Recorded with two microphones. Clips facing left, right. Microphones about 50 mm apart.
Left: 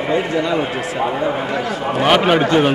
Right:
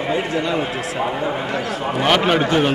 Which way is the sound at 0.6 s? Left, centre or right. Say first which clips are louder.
Left 2 dB; centre.